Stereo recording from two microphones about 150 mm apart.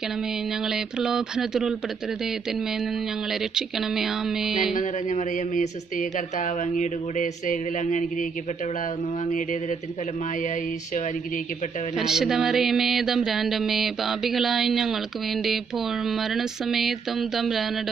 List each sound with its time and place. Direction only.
0.7 s speech: 5° right (ahead or behind)
3.5 s speech: 5° right (ahead or behind)
4.7 s speech: 55° left (ahead or behind)
12.0 s speech: 5° right (ahead or behind)
16.1 s speech: centre (ahead or behind)